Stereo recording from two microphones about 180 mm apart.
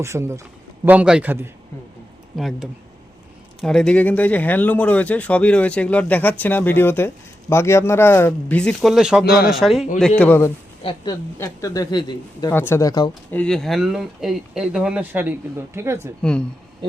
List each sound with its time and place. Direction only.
0.0 s a man's voice: 15° right (ahead or behind)
10.2 s speech: 10° left (ahead or behind)
10.8 s a woman's voice: 20° left (ahead or behind)
12.5 s speech: 15° left (ahead or behind)
13.3 s speech: 5° left (ahead or behind); by 16.1 s 15° right (ahead or behind)